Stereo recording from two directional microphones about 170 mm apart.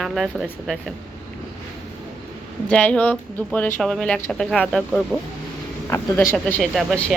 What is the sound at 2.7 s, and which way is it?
A woman's voice, 5° left (ahead or behind).